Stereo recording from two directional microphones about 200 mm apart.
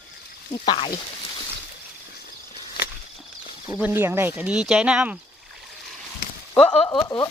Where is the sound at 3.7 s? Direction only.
10° right (ahead or behind).